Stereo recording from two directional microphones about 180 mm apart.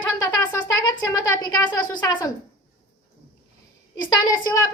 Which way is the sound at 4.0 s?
20° left (ahead or behind).